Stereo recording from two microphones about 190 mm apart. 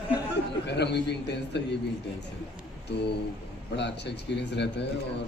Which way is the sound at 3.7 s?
65° left (ahead or behind).